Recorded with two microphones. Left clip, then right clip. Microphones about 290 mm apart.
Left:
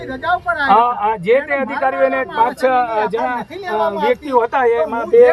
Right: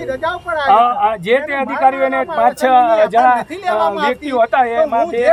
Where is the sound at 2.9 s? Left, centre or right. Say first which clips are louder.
Right 6 dB; right.